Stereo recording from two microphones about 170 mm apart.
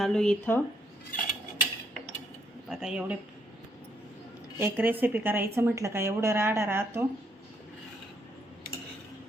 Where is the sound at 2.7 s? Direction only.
5° right (ahead or behind).